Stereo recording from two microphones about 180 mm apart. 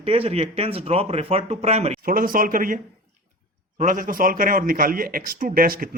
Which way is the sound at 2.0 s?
50° right (ahead or behind).